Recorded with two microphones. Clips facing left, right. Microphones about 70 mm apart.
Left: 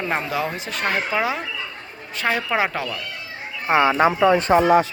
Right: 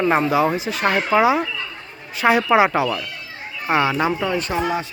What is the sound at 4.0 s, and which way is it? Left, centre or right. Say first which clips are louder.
Speech: left 3 dB; left.